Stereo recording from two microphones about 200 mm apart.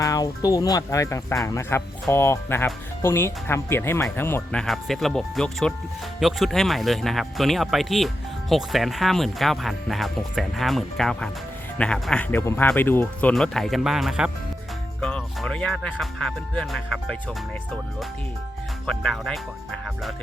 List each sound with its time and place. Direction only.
0.0 s speech: 15° left (ahead or behind)
18.9 s speech: centre (ahead or behind)